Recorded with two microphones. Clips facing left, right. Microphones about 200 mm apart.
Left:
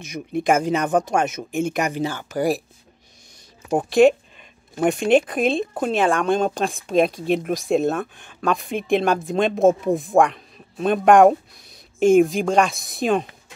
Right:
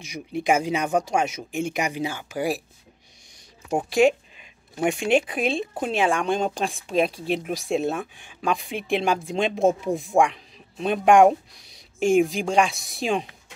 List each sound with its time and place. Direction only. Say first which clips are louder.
0.3 s speech: left 3 dB; 50° left (ahead or behind)
3.9 s a sound: left 5 dB; 10° right (ahead or behind)
5.0 s speech: left 5 dB; 50° left (ahead or behind)
6.1 s speech: left 4 dB; 15° right (ahead or behind)
6.4 s speech: left 4 dB; 50° left (ahead or behind)